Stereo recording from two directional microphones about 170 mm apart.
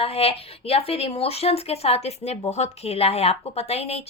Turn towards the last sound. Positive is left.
turn(degrees=40)  # may be behind; listen again after turning